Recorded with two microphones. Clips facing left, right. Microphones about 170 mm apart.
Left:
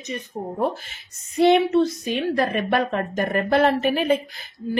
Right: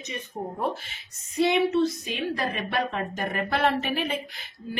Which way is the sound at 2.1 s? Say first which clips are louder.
Left 7 dB; 55° left (ahead or behind).